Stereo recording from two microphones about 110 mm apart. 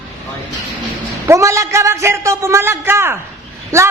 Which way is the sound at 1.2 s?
25° right (ahead or behind).